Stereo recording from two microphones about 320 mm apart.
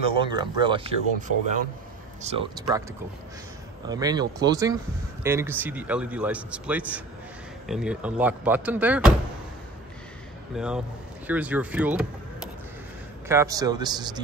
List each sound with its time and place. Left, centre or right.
0.2 s speech: centre
3.8 s a man's voice: centre
10.5 s a man's voice: centre
13.3 s speech: centre